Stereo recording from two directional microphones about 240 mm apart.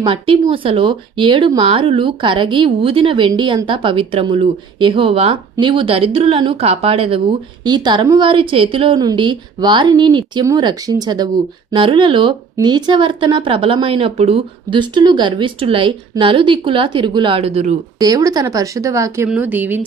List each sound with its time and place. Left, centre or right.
0.0 s speech: right